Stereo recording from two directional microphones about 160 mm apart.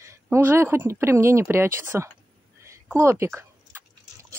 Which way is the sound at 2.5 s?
15° right (ahead or behind).